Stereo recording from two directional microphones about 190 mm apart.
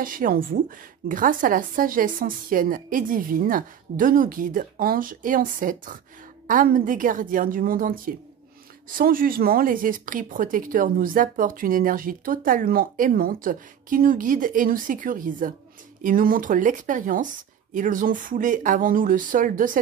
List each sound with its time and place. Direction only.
0.0 s speech: 45° right (ahead or behind)